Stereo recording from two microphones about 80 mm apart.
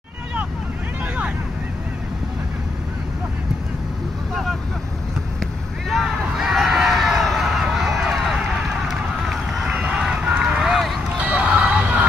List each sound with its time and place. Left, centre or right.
5.9 s a sound: centre
8.8 s run: centre
11.1 s music: centre